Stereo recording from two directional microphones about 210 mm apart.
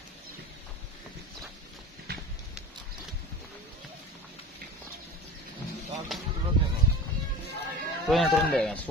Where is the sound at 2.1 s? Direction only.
50° right (ahead or behind).